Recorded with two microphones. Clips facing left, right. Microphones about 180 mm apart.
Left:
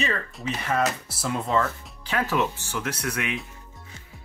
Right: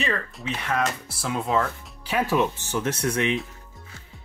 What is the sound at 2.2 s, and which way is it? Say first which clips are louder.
Speech: right 3 dB; 15° right (ahead or behind).